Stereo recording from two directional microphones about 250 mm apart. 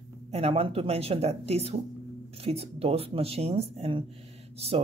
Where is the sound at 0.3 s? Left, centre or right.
Right.